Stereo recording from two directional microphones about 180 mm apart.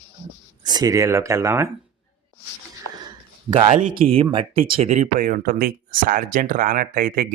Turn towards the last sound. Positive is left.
turn(degrees=-50)  # may be behind; listen again after turning